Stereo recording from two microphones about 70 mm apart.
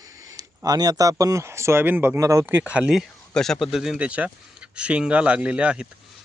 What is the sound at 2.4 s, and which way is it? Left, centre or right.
Speech, right.